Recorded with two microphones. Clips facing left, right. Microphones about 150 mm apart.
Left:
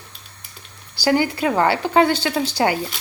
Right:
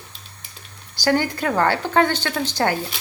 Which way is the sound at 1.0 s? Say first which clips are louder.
Left 2 dB; 10° left (ahead or behind).